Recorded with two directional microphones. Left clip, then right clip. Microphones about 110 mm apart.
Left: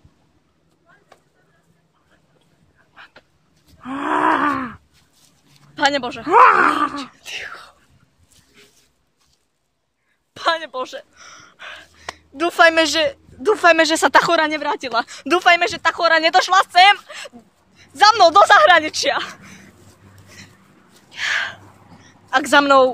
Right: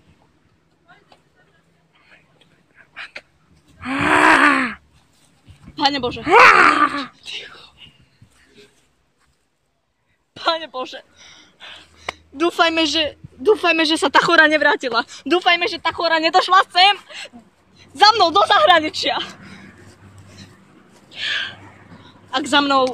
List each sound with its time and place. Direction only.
2.9 s a sound: centre (ahead or behind)
5.8 s speech: 30° left (ahead or behind)
7.2 s speech: 50° left (ahead or behind)
10.3 s speech: 25° left (ahead or behind); by 14.9 s 10° left (ahead or behind)
14.9 s speech: 25° left (ahead or behind)
15.2 s speech: 40° left (ahead or behind); by 16.1 s 20° left (ahead or behind)
16.1 s speech: 5° right (ahead or behind)
16.5 s speech: 15° left (ahead or behind)
18.3 s speech: 30° left (ahead or behind)
18.6 s speech: centre (ahead or behind)
18.9 s speech: 20° left (ahead or behind)
19.1 s a sound: 30° left (ahead or behind)
21.1 s a sound: 40° left (ahead or behind)
22.3 s speech: 45° left (ahead or behind)